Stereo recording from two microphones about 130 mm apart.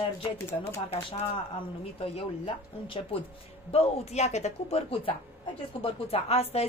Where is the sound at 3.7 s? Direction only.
55° left (ahead or behind).